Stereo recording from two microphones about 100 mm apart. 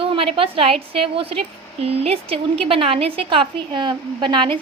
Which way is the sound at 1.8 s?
80° right.